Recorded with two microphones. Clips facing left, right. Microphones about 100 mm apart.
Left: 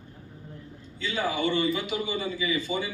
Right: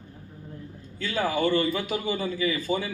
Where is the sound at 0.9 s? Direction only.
45° right (ahead or behind).